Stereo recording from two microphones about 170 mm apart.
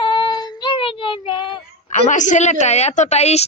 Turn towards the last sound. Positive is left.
turn(degrees=40)  # may be behind; listen again after turning